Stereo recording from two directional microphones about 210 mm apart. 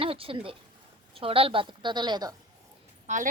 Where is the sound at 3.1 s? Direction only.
35° right (ahead or behind).